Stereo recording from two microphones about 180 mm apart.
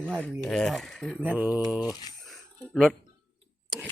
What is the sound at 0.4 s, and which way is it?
Speech, 5° left (ahead or behind).